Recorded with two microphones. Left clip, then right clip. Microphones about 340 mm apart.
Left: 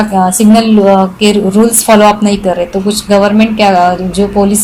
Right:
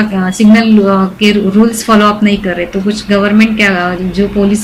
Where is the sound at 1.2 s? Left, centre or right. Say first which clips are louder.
Left 2 dB; left.